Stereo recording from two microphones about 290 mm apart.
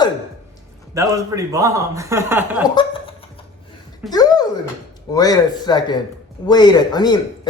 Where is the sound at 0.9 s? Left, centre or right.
Centre.